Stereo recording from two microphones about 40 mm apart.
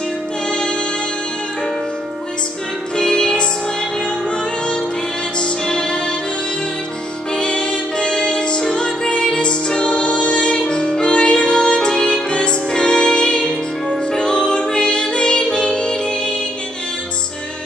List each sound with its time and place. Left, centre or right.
0.5 s music: left
3.0 s music: centre
5.4 s music: left
7.3 s music: left